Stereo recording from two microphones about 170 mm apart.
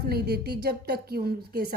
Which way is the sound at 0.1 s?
70° right (ahead or behind).